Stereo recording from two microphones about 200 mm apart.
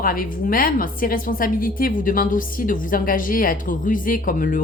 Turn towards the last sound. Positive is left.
turn(degrees=40)  # may be behind; listen again after turning